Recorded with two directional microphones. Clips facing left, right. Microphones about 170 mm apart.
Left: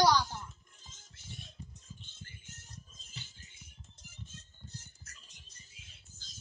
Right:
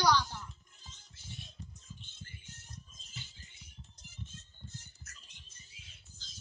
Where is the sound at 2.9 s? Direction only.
45° left (ahead or behind).